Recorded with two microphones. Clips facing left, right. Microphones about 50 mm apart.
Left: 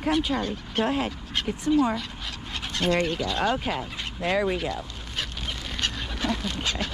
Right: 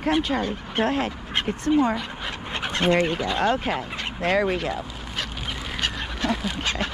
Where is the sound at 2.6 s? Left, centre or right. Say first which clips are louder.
Right 4 dB; right.